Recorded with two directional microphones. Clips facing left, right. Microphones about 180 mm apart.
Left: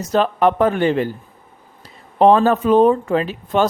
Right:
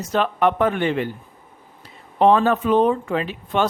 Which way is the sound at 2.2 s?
35° left (ahead or behind).